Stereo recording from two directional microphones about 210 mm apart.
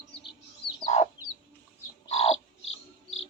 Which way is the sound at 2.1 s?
30° left (ahead or behind).